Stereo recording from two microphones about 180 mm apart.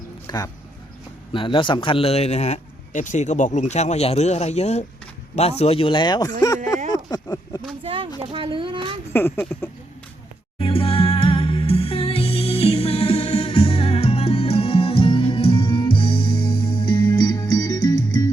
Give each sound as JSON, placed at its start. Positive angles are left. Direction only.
{"t": 0.3, "sound": "a man's voice", "side_deg": 20}
{"t": 6.9, "sound": "a sound", "side_deg": 20}
{"t": 7.9, "sound": "a sound", "side_deg": -30}
{"t": 8.2, "sound": "speech", "side_deg": -30}
{"t": 9.1, "sound": "speech", "side_deg": 10}
{"t": 10.6, "sound": "music", "side_deg": 30}